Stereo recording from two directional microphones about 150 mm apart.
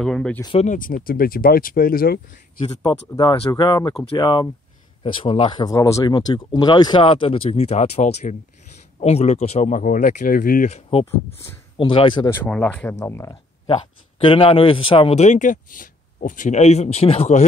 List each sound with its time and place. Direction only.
0.0 s speech: 5° left (ahead or behind)
0.6 s speech: 60° left (ahead or behind); by 2.6 s 80° left
2.6 s speech: 25° left (ahead or behind); by 10.7 s 70° left (ahead or behind)
10.7 s speech: 40° left (ahead or behind)
12.4 s speech: 10° left (ahead or behind)
14.2 s a man's voice: 35° left (ahead or behind)